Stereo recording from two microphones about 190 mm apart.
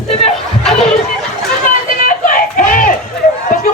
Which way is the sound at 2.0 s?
45° left (ahead or behind).